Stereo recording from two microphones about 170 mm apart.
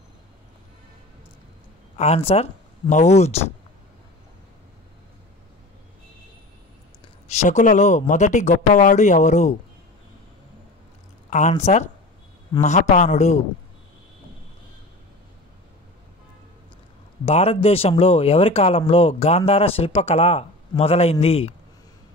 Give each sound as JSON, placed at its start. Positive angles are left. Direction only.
{"t": 2.0, "sound": "speech", "side_deg": 35}
{"t": 7.2, "sound": "speech", "side_deg": 40}
{"t": 11.2, "sound": "speech", "side_deg": 45}
{"t": 17.2, "sound": "speech", "side_deg": 35}